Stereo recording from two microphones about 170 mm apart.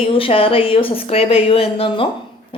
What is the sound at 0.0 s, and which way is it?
A woman's voice, 30° left (ahead or behind).